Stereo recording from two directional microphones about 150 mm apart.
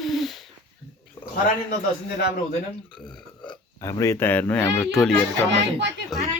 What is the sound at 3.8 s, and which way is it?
Speech, 20° left (ahead or behind).